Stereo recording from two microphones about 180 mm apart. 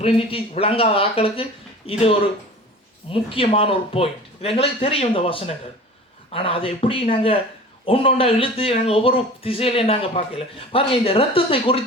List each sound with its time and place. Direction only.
0.0 s speech: 30° left (ahead or behind)